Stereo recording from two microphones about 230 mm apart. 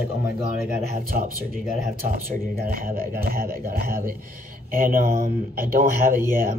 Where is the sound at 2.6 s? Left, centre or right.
Right.